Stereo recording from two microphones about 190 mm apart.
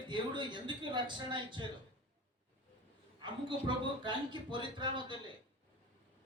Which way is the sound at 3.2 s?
25° right (ahead or behind).